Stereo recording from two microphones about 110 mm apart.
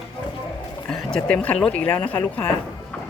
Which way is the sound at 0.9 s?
5° left (ahead or behind).